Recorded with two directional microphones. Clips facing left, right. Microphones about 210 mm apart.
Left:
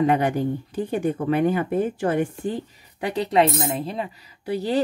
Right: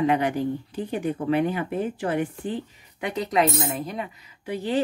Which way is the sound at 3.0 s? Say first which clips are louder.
Left 3 dB; 30° left (ahead or behind).